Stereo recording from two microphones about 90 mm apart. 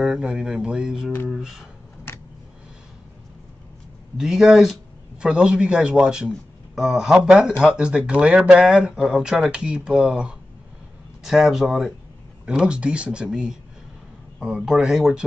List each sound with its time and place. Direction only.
0.0 s speech: 10° right (ahead or behind)
2.1 s a sound: 25° left (ahead or behind)
4.2 s speech: 5° right (ahead or behind)